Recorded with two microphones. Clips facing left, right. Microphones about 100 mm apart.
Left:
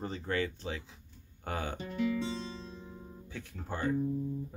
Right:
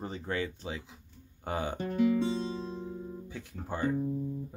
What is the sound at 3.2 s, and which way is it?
Speech, 15° right (ahead or behind).